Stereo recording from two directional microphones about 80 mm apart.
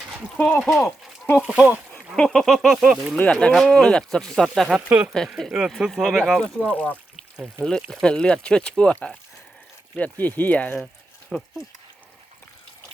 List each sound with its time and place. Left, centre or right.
0.6 s speech: centre
1.4 s speech: centre
2.1 s speech: centre
4.9 s speech: right
5.7 s speech: centre
6.4 s speech: centre